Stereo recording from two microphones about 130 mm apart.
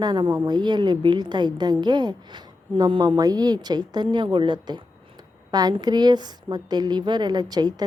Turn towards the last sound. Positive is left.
turn(degrees=-30)  # may be behind; listen again after turning